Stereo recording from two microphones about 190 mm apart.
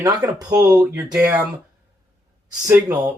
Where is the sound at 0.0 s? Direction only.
15° right (ahead or behind).